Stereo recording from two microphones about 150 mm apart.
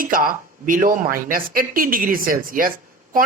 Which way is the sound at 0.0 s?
70° right (ahead or behind).